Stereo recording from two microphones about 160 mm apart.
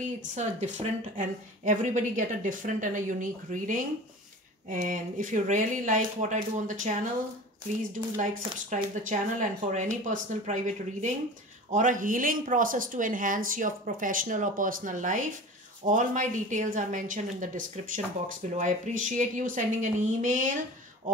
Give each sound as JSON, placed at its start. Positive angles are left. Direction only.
{"t": 0.2, "sound": "a woman's voice", "side_deg": -50}